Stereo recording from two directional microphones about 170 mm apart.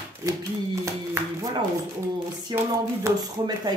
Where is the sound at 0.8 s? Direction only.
20° right (ahead or behind).